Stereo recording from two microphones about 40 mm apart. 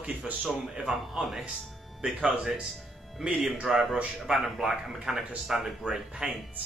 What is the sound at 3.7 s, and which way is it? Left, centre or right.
Speech, centre.